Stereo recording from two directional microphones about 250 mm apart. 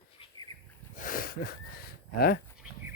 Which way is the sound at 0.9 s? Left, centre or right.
Left.